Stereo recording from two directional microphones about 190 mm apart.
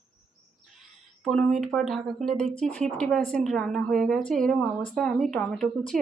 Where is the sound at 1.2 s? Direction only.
Centre (ahead or behind).